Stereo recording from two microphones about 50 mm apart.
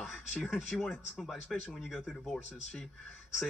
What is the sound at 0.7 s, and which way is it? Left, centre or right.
Speech, left.